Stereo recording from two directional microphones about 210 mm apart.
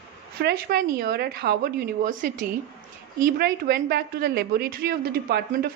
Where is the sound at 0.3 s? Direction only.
45° right (ahead or behind).